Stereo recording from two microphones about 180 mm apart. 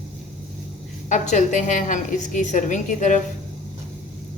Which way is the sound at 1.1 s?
40° left (ahead or behind).